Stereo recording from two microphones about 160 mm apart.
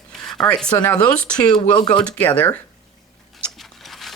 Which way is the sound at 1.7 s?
30° left (ahead or behind).